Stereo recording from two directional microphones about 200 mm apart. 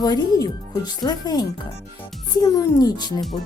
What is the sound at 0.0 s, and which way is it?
Speech, 20° left (ahead or behind).